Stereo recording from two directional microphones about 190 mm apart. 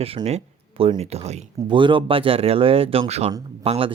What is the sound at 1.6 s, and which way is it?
Speech, 25° right (ahead or behind).